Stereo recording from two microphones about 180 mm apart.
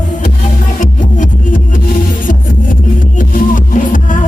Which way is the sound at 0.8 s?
45° left (ahead or behind).